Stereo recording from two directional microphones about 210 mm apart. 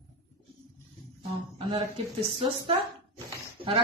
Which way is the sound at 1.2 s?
25° right (ahead or behind).